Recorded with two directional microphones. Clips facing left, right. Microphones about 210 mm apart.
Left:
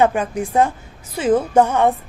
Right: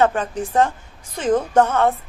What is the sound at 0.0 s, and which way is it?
A woman's voice, 10° left (ahead or behind).